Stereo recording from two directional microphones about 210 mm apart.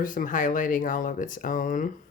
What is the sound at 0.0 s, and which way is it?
Speech, 40° left (ahead or behind).